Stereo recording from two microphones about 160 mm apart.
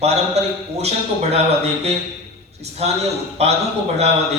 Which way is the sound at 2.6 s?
40° right (ahead or behind).